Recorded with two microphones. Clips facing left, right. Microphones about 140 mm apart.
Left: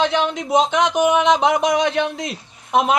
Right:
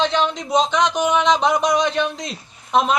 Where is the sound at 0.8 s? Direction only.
15° left (ahead or behind).